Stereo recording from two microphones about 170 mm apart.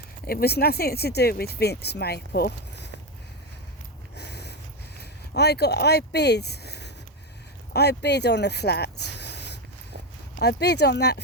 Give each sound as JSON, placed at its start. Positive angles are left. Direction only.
{"t": 0.3, "sound": "speech", "side_deg": 65}
{"t": 4.2, "sound": "snort", "side_deg": 75}
{"t": 4.9, "sound": "speech", "side_deg": 75}